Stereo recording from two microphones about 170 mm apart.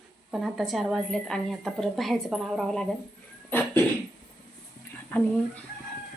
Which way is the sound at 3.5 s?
10° left (ahead or behind).